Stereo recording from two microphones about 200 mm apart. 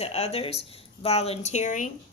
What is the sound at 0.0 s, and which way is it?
A woman's voice, 30° left (ahead or behind).